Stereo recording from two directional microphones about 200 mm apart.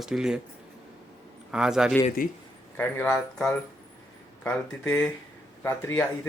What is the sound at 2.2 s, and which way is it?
Speech, 45° left (ahead or behind).